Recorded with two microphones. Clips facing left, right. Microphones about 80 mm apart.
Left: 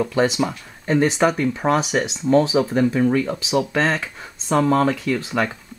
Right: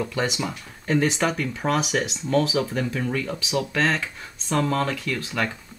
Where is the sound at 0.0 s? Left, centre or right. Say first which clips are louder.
Left 7 dB; centre.